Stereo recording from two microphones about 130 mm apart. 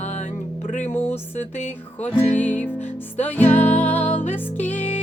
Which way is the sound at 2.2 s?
15° left (ahead or behind).